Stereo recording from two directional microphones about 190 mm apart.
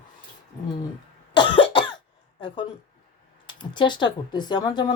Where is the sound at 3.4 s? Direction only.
25° left (ahead or behind).